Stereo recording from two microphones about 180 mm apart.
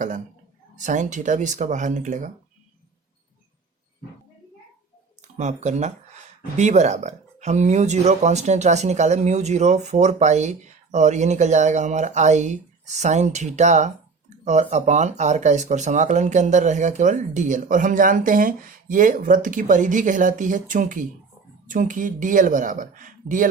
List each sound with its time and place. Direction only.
0.8 s speech: 45° right (ahead or behind)
5.4 s speech: 40° right (ahead or behind)